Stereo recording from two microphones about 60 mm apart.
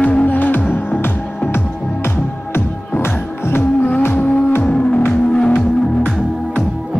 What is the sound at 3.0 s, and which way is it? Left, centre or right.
Music, left.